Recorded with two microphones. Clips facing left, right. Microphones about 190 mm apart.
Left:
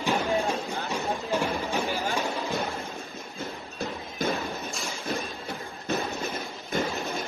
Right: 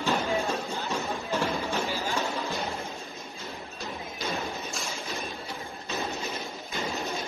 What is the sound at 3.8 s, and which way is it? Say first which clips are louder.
Thump: left 6 dB; 55° left (ahead or behind).